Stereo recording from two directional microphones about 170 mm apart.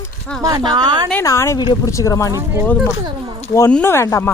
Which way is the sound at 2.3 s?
10° right (ahead or behind).